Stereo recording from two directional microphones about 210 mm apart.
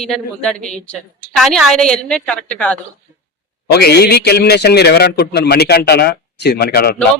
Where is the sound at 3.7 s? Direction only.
50° left (ahead or behind).